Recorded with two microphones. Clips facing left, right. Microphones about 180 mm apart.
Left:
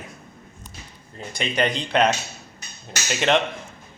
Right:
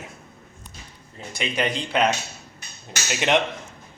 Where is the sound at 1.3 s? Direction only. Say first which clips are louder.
Left 2 dB; 5° right (ahead or behind).